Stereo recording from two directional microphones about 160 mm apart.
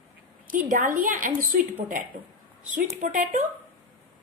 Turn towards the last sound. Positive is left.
turn(degrees=-50)  # may be behind; listen again after turning